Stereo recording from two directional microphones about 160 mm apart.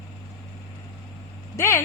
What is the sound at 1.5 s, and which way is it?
Speech, 15° left (ahead or behind).